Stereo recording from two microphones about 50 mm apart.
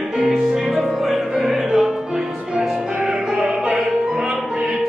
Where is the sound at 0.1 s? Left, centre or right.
Centre.